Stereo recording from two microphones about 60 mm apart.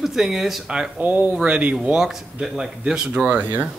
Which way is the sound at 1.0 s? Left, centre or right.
Right.